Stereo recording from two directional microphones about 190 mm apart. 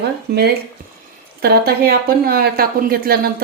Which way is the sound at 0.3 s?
55° right (ahead or behind).